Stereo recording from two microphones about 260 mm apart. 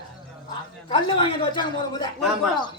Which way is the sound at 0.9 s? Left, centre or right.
Centre.